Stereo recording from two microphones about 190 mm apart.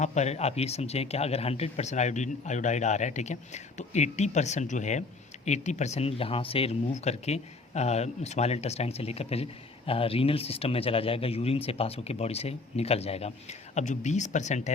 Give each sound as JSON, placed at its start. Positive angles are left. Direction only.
{"t": 0.0, "sound": "speech", "side_deg": 35}